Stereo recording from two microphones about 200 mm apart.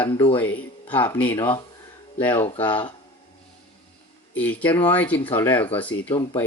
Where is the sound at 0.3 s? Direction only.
10° left (ahead or behind).